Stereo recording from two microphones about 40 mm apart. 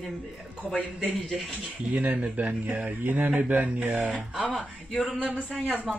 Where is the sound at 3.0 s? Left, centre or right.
Right.